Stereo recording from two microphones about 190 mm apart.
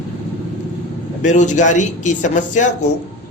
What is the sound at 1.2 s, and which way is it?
Speech, 40° left (ahead or behind).